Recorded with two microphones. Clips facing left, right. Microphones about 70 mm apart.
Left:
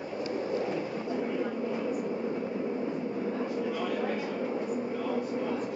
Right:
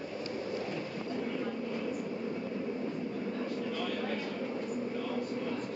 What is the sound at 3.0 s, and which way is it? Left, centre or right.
Vehicle, centre.